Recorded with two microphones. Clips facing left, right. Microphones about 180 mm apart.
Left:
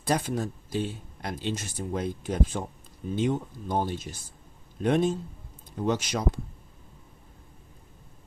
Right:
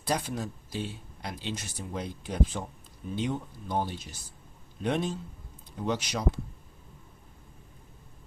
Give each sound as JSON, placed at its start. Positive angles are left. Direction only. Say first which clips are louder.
{"t": 0.0, "sound": "speech", "louder": "left 4 dB", "side_deg": 50}